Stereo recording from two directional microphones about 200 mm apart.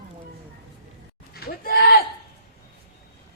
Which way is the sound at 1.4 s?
45° left (ahead or behind).